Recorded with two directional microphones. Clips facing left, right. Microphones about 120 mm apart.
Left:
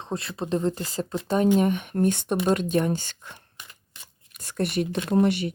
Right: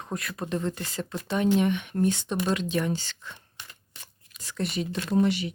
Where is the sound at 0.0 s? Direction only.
30° left (ahead or behind); by 3.3 s 50° left (ahead or behind).